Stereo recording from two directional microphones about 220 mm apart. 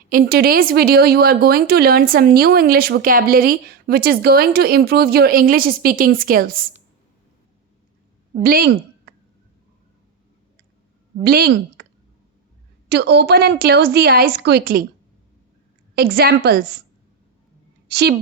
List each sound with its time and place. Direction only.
0.1 s speech: 40° right (ahead or behind)
8.4 s a woman's voice: 40° right (ahead or behind)
11.2 s speech: 45° right (ahead or behind)
12.9 s speech: 50° right (ahead or behind)
16.0 s speech: 45° right (ahead or behind)
17.8 s a woman's voice: 50° right (ahead or behind)